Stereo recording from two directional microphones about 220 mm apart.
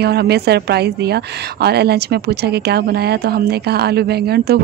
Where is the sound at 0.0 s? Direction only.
45° right (ahead or behind).